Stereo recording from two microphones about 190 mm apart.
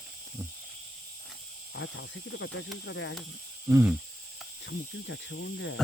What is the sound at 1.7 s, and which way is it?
Speech, 75° left (ahead or behind).